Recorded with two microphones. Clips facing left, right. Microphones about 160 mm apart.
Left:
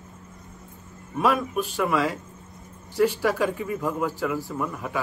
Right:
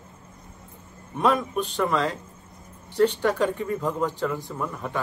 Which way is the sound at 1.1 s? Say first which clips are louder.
Even; 5° left (ahead or behind).